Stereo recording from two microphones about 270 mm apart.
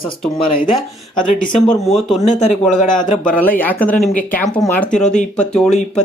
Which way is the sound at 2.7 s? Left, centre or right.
Centre.